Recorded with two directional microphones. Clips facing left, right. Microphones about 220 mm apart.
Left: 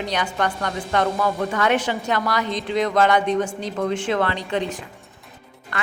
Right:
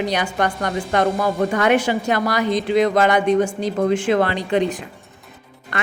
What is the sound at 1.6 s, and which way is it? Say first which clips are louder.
A woman's voice: right 3 dB; 10° right (ahead or behind).